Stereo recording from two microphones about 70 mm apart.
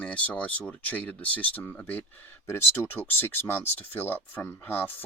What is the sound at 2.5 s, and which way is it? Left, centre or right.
Speech, left.